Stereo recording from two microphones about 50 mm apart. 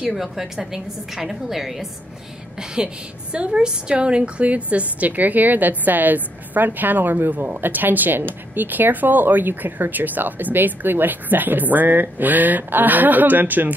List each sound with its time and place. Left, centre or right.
0.1 s a woman's voice: centre
2.8 s a woman's voice: centre; by 13.7 s right